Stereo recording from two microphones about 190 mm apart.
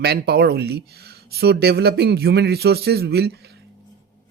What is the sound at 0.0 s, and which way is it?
Speech, 55° right (ahead or behind).